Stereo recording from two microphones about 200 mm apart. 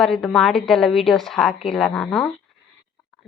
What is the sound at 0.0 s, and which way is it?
A woman's voice, centre (ahead or behind).